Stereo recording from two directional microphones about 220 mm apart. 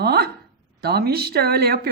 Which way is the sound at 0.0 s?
45° right (ahead or behind).